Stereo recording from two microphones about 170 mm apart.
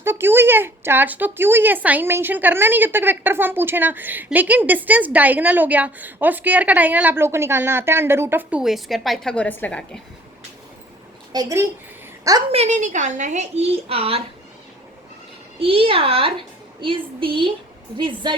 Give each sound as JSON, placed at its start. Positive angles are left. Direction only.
{"t": 0.0, "sound": "a woman's voice", "side_deg": -15}
{"t": 11.3, "sound": "a woman's voice", "side_deg": -20}
{"t": 12.5, "sound": "a woman's voice", "side_deg": -40}
{"t": 15.5, "sound": "a woman's voice", "side_deg": -30}